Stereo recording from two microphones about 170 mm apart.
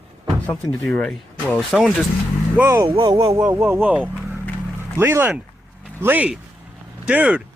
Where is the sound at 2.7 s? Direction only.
25° right (ahead or behind); by 7.4 s 5° right (ahead or behind).